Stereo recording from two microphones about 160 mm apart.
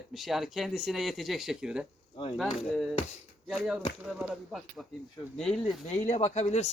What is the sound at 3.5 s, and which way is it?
Speech, 5° right (ahead or behind).